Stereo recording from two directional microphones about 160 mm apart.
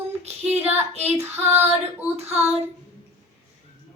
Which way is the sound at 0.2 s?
40° right (ahead or behind).